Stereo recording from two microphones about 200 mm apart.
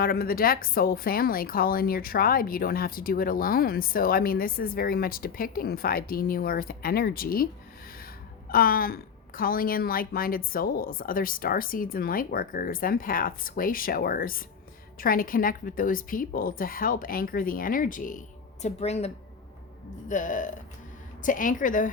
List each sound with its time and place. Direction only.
0.0 s a woman's voice: 50° left (ahead or behind)
8.4 s a woman's voice: 45° left (ahead or behind)